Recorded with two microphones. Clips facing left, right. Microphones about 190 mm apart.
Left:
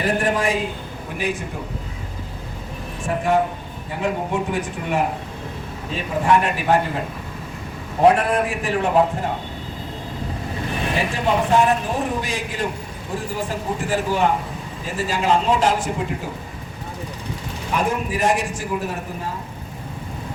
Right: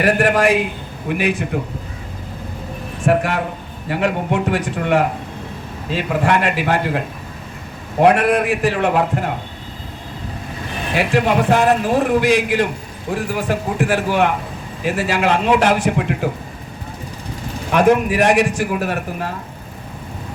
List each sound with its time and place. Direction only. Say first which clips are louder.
0.0 s a man's voice: right 5 dB; 75° right (ahead or behind)
3.1 s a man's voice: right 2 dB; 75° right (ahead or behind)
8.0 s a man's voice: right 2 dB; 70° right (ahead or behind)
10.9 s a man's voice: right 6 dB; 75° right (ahead or behind)
17.7 s a man's voice: right 9 dB; 75° right (ahead or behind)